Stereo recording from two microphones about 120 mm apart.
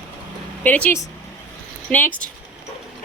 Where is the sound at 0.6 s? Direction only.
15° left (ahead or behind).